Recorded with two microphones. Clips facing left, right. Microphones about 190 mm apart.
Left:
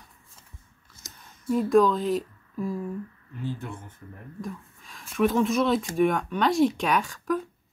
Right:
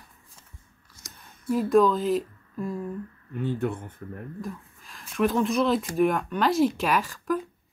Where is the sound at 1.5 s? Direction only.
Centre (ahead or behind).